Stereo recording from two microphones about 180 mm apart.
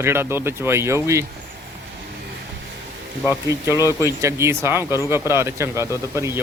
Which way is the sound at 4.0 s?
15° right (ahead or behind).